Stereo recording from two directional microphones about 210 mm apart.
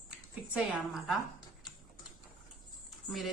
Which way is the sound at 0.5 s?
5° right (ahead or behind).